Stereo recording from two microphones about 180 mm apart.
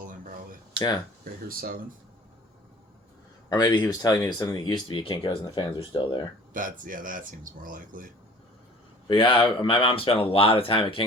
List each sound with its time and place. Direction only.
0.0 s a sound: 50° right (ahead or behind)
0.8 s speech: 20° left (ahead or behind)
1.2 s speech: 55° right (ahead or behind)
3.5 s speech: 25° left (ahead or behind)
6.5 s speech: 50° right (ahead or behind)
9.0 s speech: 30° left (ahead or behind)